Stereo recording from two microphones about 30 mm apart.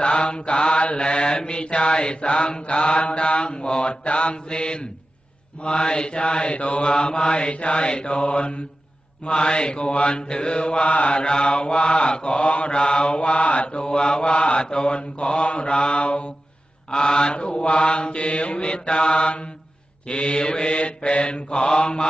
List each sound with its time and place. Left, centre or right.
0.0 s mantra: left
11.1 s mantra: left
16.9 s mantra: left